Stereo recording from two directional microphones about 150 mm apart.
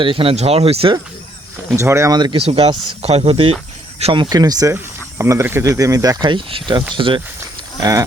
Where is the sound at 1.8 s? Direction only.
20° right (ahead or behind); by 7.2 s 35° right (ahead or behind).